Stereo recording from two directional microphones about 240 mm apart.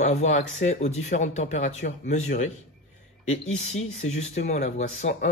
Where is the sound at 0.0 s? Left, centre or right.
Left.